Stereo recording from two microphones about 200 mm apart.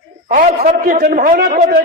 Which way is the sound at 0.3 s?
40° right (ahead or behind).